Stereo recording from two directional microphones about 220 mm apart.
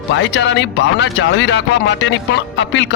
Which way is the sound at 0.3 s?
55° left (ahead or behind).